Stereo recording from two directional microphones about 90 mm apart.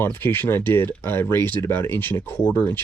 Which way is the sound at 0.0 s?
25° left (ahead or behind).